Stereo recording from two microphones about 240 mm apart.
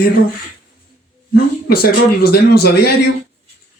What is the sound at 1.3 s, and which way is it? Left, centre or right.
Speech, left.